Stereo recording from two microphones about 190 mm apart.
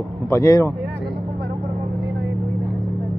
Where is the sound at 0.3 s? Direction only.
15° left (ahead or behind).